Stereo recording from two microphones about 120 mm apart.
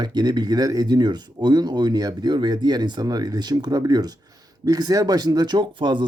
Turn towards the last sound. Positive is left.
turn(degrees=-40)  # may be behind; listen again after turning